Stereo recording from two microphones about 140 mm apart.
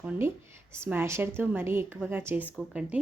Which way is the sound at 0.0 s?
15° right (ahead or behind).